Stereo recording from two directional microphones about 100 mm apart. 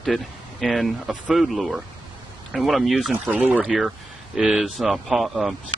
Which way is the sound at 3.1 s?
15° right (ahead or behind).